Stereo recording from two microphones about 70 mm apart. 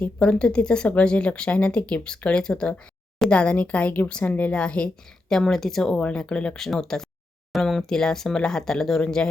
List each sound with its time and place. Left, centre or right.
0.2 s speech: centre
5.3 s a woman's voice: centre